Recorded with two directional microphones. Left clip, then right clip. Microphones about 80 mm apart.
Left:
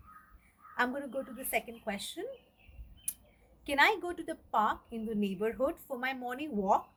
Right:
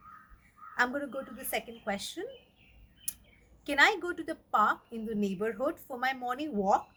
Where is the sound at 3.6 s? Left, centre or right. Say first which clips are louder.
Right 2 dB; centre.